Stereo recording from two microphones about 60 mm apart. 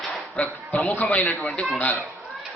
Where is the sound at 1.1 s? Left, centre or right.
Left.